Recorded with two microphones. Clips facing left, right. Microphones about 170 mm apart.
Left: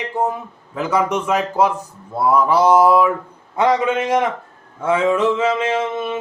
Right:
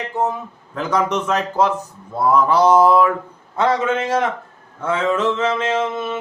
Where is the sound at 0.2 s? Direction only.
10° left (ahead or behind).